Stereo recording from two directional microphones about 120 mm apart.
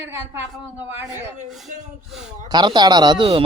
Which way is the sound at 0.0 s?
15° right (ahead or behind).